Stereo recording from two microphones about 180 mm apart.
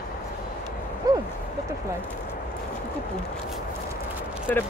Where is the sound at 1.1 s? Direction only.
20° right (ahead or behind).